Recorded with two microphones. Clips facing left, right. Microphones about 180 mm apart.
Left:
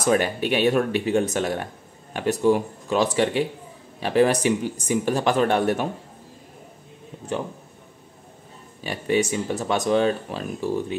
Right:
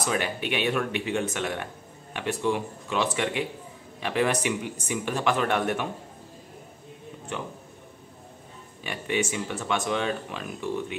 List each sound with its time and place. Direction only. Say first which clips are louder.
0.0 s speech: left 7 dB; 45° left (ahead or behind)
7.3 s speech: left 7 dB; 35° left (ahead or behind)
8.8 s speech: left 6 dB; 40° left (ahead or behind)